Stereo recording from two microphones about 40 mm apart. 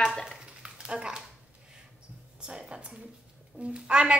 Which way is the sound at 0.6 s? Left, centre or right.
Right.